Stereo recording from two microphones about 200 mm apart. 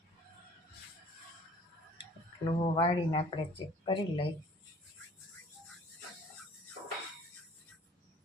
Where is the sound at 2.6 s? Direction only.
25° left (ahead or behind).